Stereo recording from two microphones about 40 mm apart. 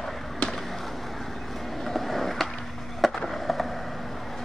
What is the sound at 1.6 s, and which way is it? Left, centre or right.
Skateboard, centre.